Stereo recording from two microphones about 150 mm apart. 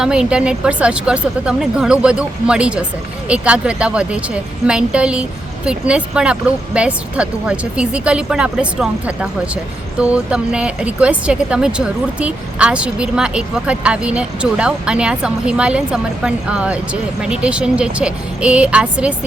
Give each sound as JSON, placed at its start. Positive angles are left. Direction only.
{"t": 0.0, "sound": "speech", "side_deg": -5}